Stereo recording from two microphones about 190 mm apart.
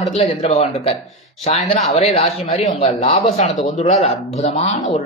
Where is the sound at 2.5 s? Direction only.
35° left (ahead or behind).